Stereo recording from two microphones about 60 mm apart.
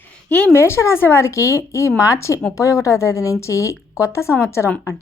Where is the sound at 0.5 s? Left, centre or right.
Left.